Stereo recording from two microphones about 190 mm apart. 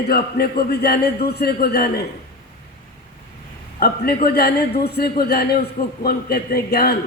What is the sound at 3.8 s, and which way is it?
A man's voice, 55° left (ahead or behind).